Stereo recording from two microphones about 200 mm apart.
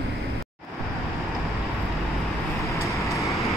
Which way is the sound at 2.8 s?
15° left (ahead or behind).